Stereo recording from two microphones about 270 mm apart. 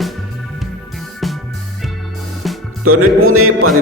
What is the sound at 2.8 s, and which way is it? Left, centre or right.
Speech, right.